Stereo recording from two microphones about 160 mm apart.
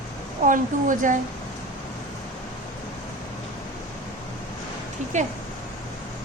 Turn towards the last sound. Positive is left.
turn(degrees=-50)  # may be behind; listen again after turning